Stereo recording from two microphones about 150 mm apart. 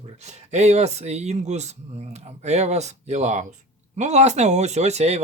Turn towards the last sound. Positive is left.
turn(degrees=-45)  # may be behind; listen again after turning